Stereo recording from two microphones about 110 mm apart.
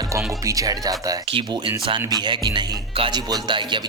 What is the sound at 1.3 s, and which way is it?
Music, 50° right (ahead or behind).